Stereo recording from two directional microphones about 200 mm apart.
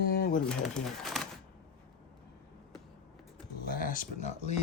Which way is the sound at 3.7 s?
45° left (ahead or behind).